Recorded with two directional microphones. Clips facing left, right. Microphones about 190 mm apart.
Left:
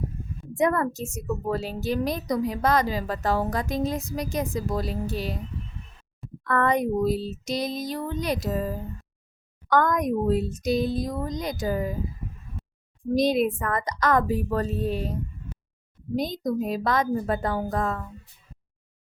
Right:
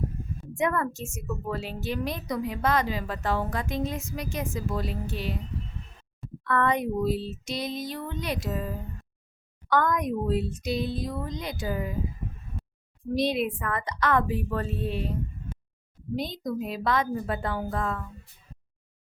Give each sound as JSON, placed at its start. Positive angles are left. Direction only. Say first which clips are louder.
{"t": 0.5, "sound": "a woman's voice", "louder": "left 4 dB", "side_deg": 40}
{"t": 6.4, "sound": "a woman's voice", "louder": "left 2 dB", "side_deg": 40}
{"t": 13.1, "sound": "a woman's voice", "louder": "left 4 dB", "side_deg": 40}